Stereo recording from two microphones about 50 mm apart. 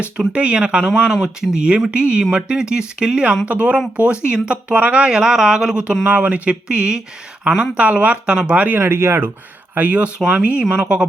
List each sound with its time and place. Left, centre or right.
0.3 s speech: right
3.4 s speech: right; by 5.8 s centre
6.1 s speech: right
8.8 s speech: right
9.7 s speech: right